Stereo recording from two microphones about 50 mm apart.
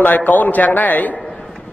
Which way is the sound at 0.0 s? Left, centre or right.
Left.